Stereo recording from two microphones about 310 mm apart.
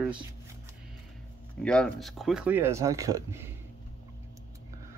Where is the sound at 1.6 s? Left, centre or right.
Centre.